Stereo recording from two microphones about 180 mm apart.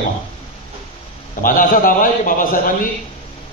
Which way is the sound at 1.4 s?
50° left (ahead or behind).